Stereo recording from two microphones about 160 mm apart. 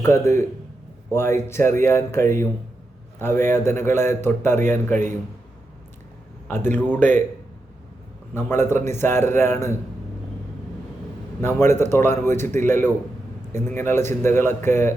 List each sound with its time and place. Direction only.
0.0 s a man's voice: 15° left (ahead or behind)
6.5 s a man's voice: 10° left (ahead or behind)
8.3 s a man's voice: 15° left (ahead or behind)
11.3 s a man's voice: 15° left (ahead or behind)